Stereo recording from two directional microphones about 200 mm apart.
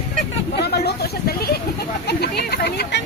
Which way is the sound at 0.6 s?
55° left (ahead or behind).